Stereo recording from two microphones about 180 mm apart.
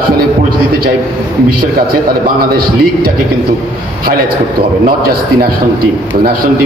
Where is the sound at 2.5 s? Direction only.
55° right (ahead or behind).